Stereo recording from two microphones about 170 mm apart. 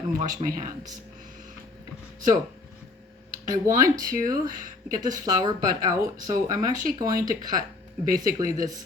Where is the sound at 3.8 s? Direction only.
20° right (ahead or behind).